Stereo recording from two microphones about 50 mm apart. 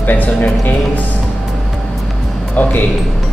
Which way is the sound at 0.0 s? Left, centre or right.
Left.